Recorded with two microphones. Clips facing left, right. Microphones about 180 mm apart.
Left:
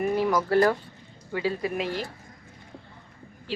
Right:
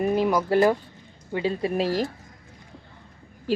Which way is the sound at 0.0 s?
20° right (ahead or behind).